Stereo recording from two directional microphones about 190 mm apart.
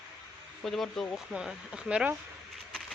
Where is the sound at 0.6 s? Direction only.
Centre (ahead or behind).